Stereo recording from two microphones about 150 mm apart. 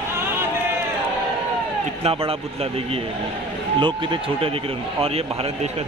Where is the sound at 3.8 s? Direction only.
35° right (ahead or behind).